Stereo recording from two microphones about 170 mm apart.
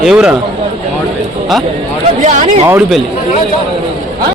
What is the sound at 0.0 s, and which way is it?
Speech, 5° right (ahead or behind).